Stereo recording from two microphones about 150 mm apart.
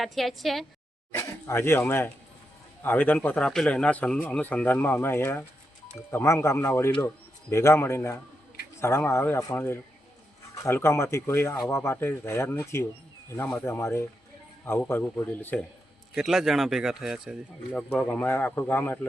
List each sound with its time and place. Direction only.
0.0 s speech: centre (ahead or behind)
1.1 s speech: 15° left (ahead or behind)
16.1 s speech: centre (ahead or behind)
17.7 s speech: 5° left (ahead or behind)